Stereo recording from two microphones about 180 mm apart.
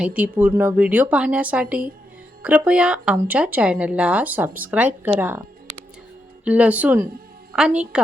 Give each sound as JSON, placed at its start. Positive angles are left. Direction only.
{"t": 0.0, "sound": "speech", "side_deg": -10}
{"t": 6.4, "sound": "a woman's voice", "side_deg": -5}